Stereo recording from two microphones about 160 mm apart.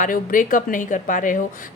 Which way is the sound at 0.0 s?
55° left (ahead or behind).